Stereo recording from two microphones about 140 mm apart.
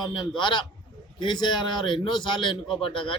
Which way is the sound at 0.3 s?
35° left (ahead or behind).